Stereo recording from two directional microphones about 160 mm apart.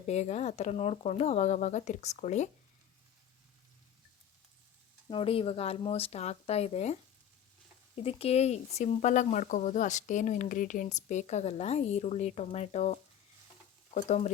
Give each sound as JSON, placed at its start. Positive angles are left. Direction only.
{"t": 0.0, "sound": "speech", "side_deg": 45}
{"t": 5.0, "sound": "speech", "side_deg": 35}
{"t": 8.0, "sound": "speech", "side_deg": 40}